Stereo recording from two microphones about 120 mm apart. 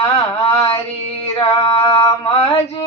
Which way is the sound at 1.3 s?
50° left (ahead or behind).